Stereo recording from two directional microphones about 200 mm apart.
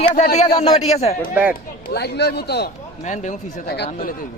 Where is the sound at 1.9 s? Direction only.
55° left (ahead or behind).